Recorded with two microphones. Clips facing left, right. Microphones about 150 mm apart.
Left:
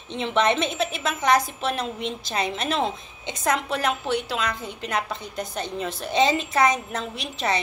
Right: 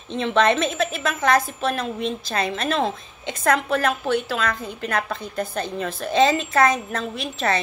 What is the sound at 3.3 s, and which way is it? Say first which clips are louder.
Speech: right 4 dB; 55° right (ahead or behind).